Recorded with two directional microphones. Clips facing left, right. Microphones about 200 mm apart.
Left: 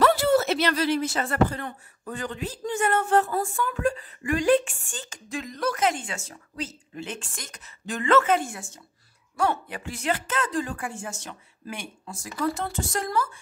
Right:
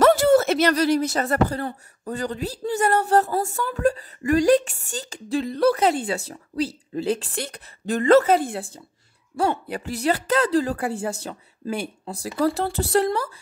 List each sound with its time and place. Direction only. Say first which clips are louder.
0.0 s speech: right 5 dB; 45° right (ahead or behind)
12.7 s speech: right 9 dB; 65° right (ahead or behind)
13.0 s speech: right 4 dB; 35° right (ahead or behind)